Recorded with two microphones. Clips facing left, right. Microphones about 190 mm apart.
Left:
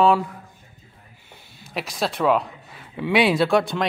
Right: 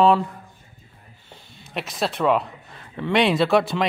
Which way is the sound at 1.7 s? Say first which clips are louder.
Even; centre (ahead or behind).